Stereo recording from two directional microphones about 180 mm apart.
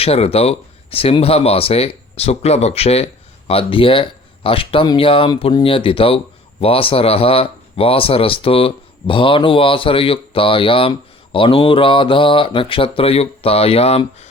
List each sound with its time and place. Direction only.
0.0 s speech: 35° left (ahead or behind)